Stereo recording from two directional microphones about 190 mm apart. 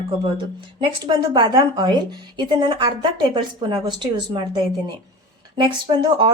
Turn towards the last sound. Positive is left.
turn(degrees=-25)  # may be behind; listen again after turning